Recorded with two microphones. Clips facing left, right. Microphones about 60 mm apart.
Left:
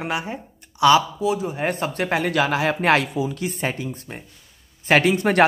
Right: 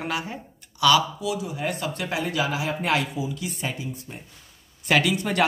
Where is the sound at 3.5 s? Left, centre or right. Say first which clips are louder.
Left 5 dB; left.